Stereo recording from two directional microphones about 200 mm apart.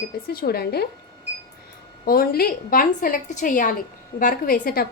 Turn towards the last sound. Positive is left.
turn(degrees=50)  # may be behind; listen again after turning